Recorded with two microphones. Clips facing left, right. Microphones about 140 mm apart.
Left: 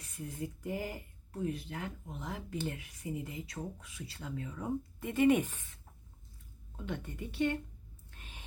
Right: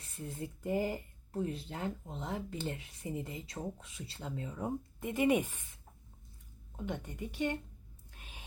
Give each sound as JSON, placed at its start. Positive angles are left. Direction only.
{"t": 0.2, "sound": "speech", "side_deg": -30}
{"t": 6.8, "sound": "speech", "side_deg": -15}
{"t": 8.2, "sound": "a sound", "side_deg": -10}